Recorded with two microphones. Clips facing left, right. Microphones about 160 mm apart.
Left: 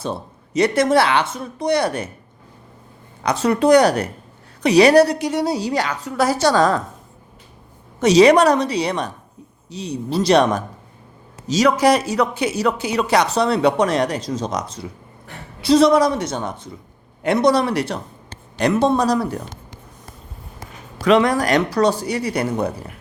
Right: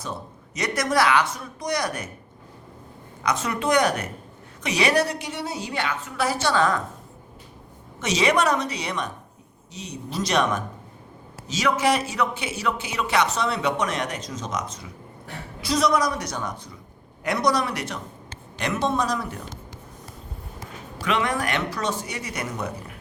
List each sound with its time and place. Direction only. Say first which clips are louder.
0.0 s speech: left 7 dB; 30° left (ahead or behind)
3.2 s speech: left 9 dB; 35° left (ahead or behind)
8.0 s speech: left 10 dB; 35° left (ahead or behind)
21.0 s speech: left 9 dB; 35° left (ahead or behind)